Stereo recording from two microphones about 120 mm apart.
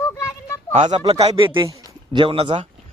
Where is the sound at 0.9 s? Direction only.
40° right (ahead or behind).